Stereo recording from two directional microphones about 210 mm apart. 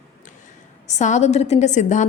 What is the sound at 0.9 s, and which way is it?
Speech, 35° left (ahead or behind).